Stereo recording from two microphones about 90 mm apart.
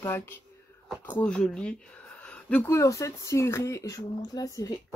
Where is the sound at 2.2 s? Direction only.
15° left (ahead or behind).